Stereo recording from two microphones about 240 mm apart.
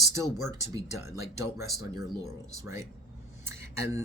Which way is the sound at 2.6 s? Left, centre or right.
Centre.